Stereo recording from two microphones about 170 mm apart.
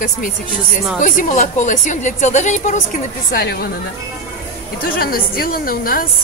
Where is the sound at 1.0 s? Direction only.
50° left (ahead or behind).